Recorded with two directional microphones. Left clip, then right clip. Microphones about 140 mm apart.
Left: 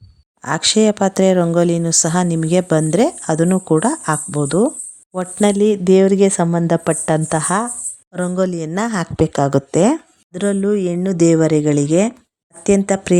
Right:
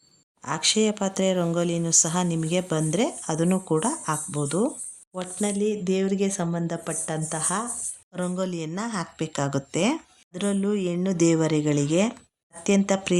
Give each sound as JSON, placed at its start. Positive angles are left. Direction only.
{"t": 0.4, "sound": "speech", "side_deg": 50}
{"t": 5.4, "sound": "a woman's voice", "side_deg": 90}
{"t": 8.1, "sound": "speech", "side_deg": 45}
{"t": 8.7, "sound": "speech", "side_deg": 70}
{"t": 10.3, "sound": "speech", "side_deg": 40}